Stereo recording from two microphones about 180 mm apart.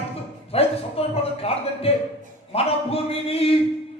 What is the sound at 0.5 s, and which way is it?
Speech, 35° left (ahead or behind).